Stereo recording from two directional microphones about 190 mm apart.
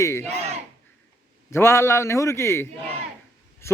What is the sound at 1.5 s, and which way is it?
A man's voice, 15° left (ahead or behind).